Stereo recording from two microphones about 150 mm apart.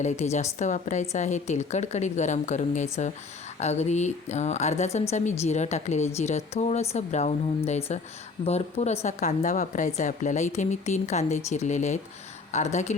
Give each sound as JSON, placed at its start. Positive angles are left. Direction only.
{"t": 0.0, "sound": "a woman's voice", "side_deg": 50}